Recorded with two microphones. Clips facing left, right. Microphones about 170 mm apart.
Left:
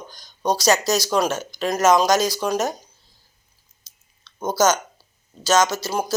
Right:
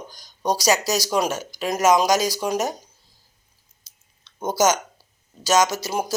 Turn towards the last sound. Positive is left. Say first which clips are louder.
# left 1 dB
turn(degrees=-15)  # may be behind; listen again after turning